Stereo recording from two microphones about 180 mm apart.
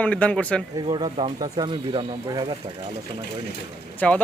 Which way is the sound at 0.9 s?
30° right (ahead or behind).